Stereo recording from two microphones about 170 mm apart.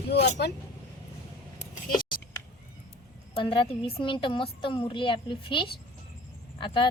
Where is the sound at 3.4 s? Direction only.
30° left (ahead or behind).